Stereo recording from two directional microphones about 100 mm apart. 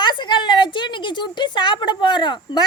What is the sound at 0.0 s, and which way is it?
A woman's voice, 50° left (ahead or behind).